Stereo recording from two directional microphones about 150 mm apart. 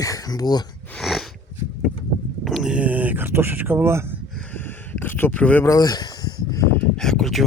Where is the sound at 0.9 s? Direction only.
Centre (ahead or behind).